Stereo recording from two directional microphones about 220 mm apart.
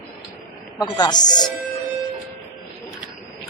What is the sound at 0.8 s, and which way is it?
Speech, 20° left (ahead or behind).